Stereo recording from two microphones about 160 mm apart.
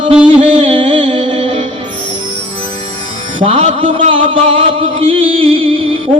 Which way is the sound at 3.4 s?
35° right (ahead or behind).